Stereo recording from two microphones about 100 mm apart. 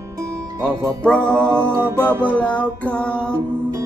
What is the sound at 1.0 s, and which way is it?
Music, 10° left (ahead or behind).